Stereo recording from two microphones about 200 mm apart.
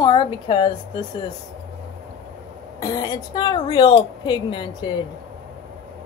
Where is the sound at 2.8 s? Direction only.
20° left (ahead or behind).